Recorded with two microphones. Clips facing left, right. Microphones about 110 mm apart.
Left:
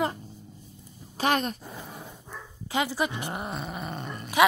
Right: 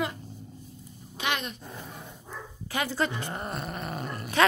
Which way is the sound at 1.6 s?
5° left (ahead or behind).